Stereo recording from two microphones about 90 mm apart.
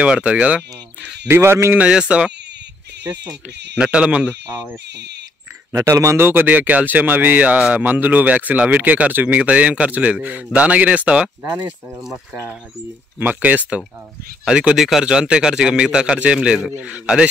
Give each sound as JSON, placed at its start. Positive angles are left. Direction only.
{"t": 0.0, "sound": "speech", "side_deg": -10}
{"t": 1.3, "sound": "speech", "side_deg": -25}
{"t": 1.8, "sound": "speech", "side_deg": -10}
{"t": 3.7, "sound": "speech", "side_deg": -10}
{"t": 5.7, "sound": "speech", "side_deg": -35}
{"t": 13.2, "sound": "speech", "side_deg": -15}